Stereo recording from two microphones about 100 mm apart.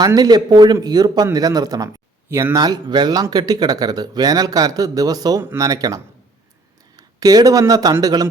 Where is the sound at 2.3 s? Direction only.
25° right (ahead or behind).